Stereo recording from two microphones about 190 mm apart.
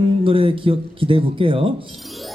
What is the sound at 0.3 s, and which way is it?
Speech, 30° right (ahead or behind).